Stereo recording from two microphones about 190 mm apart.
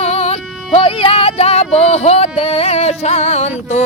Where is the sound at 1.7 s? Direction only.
35° left (ahead or behind).